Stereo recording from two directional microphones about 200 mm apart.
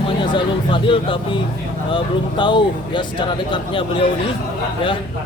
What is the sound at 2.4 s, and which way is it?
Speech, 25° left (ahead or behind).